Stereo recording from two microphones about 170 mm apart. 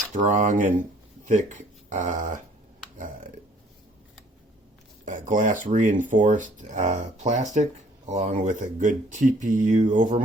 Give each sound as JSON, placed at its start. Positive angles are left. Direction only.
{"t": 0.1, "sound": "speech", "side_deg": -45}
{"t": 5.0, "sound": "speech", "side_deg": -50}